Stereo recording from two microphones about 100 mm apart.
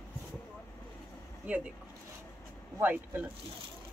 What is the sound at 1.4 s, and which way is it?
Speech, 15° right (ahead or behind).